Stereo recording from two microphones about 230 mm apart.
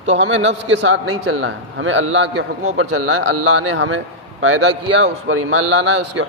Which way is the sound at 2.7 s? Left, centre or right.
Right.